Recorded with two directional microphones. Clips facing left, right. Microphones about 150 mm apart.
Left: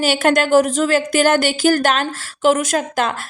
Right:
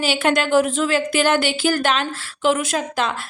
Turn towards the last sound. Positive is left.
turn(degrees=50)  # may be behind; listen again after turning